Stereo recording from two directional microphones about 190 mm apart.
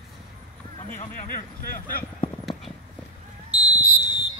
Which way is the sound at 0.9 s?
45° left (ahead or behind).